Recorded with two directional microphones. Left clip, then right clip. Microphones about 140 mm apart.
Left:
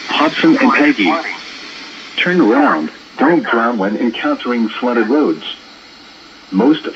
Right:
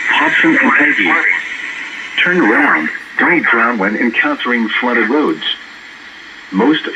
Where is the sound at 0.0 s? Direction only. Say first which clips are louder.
Right 2 dB; 60° left (ahead or behind).